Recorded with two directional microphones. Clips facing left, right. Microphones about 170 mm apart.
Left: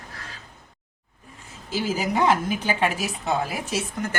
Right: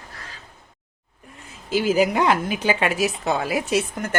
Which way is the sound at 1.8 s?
80° right.